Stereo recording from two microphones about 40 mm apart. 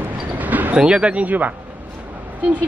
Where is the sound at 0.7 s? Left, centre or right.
Right.